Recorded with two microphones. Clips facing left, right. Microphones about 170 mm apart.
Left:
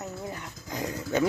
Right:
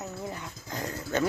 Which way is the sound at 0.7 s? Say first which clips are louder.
Left 2 dB; 15° left (ahead or behind).